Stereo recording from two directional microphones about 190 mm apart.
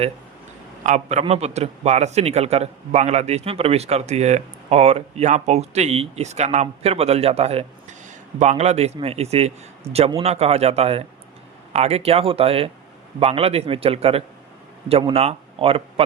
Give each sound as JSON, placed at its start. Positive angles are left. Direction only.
{"t": 0.9, "sound": "a man's voice", "side_deg": -40}